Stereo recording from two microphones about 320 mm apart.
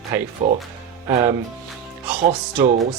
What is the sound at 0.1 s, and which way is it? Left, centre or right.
Speech, centre.